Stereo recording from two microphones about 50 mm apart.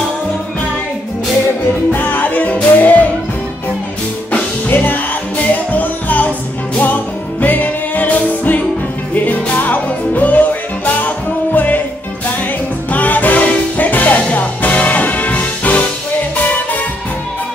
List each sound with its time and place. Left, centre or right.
1.9 s music: left
4.3 s music: left
12.9 s music: left